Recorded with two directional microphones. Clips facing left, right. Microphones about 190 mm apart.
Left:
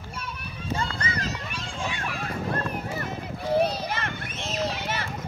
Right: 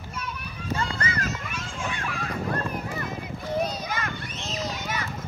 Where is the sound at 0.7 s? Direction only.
30° left (ahead or behind).